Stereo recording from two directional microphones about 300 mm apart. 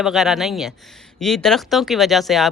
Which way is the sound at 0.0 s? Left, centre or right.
Centre.